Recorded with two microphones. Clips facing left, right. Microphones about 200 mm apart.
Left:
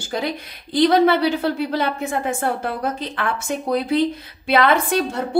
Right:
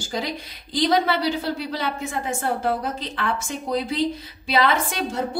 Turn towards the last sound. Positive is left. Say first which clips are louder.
# left 5 dB
turn(degrees=55)  # may be behind; listen again after turning